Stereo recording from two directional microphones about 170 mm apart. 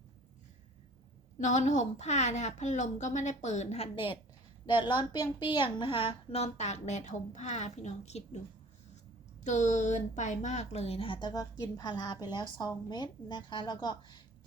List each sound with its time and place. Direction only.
1.4 s a woman's voice: 45° left (ahead or behind)
9.4 s a woman's voice: 45° left (ahead or behind); by 14.2 s 25° left (ahead or behind)